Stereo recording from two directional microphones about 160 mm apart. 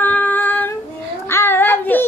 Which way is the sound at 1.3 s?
15° left (ahead or behind).